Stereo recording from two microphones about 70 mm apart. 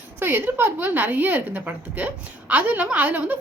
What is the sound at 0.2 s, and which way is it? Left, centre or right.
A woman's voice, right.